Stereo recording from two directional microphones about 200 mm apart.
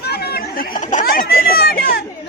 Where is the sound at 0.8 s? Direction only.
40° left (ahead or behind).